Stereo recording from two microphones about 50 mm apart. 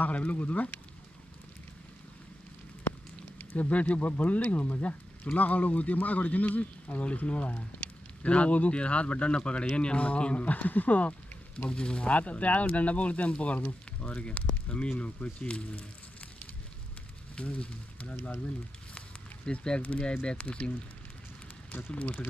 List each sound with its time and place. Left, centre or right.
0.0 s speech: left
3.3 s speech: left
17.4 s speech: left
18.9 s a sound: centre
19.8 s speech: left
21.9 s speech: left